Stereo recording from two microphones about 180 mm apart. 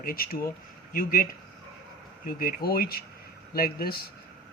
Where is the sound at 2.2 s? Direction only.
55° left (ahead or behind).